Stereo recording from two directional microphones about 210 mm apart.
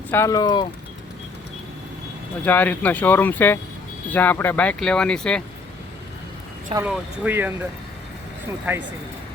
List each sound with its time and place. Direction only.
0.1 s speech: 15° left (ahead or behind)
2.4 s speech: 10° left (ahead or behind)
6.8 s speech: 5° right (ahead or behind)